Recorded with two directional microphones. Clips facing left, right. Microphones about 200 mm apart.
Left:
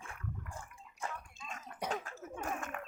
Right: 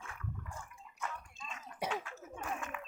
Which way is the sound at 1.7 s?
60° left (ahead or behind).